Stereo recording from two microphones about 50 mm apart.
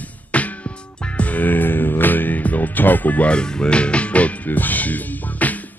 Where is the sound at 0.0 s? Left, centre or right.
Left.